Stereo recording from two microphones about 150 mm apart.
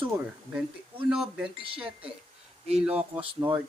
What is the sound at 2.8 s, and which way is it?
Speech, 10° right (ahead or behind).